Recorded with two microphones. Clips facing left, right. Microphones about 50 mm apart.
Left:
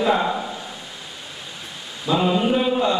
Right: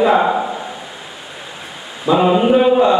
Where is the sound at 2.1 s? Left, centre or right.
Right.